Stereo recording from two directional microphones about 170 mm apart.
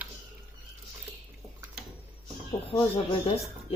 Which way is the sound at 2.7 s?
30° left (ahead or behind).